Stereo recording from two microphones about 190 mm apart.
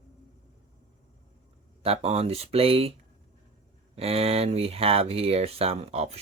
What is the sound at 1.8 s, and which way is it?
Speech, 35° right (ahead or behind).